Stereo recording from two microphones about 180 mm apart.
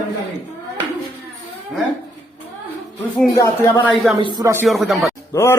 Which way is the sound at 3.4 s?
15° left (ahead or behind).